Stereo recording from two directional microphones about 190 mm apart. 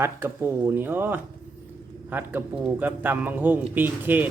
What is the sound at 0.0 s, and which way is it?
Speech, 10° right (ahead or behind).